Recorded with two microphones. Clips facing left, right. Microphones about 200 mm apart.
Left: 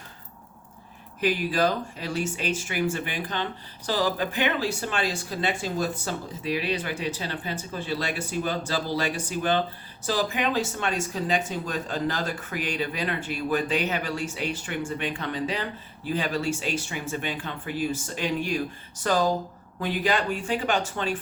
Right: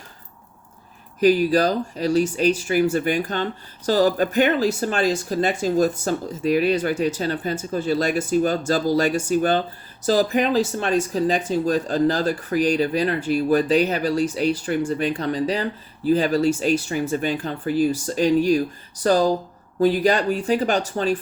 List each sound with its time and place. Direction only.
1.2 s speech: 40° right (ahead or behind)